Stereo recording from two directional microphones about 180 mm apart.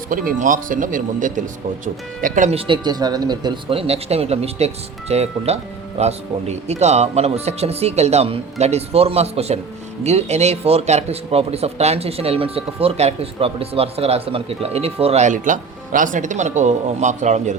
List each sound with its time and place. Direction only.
0.1 s a man's voice: 50° right (ahead or behind)